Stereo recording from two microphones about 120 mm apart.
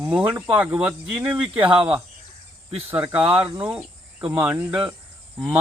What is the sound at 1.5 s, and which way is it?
Speech, 45° right (ahead or behind).